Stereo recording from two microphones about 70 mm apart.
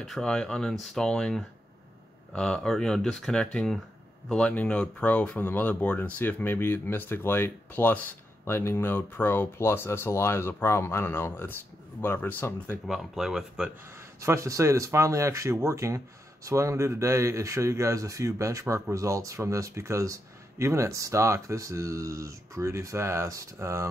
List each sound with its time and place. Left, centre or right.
0.0 s speech: centre; by 8.0 s left
8.5 s speech: left
12.8 s speech: centre
14.2 s speech: right